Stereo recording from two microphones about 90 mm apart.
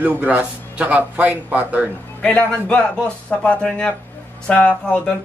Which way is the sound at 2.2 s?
10° left (ahead or behind).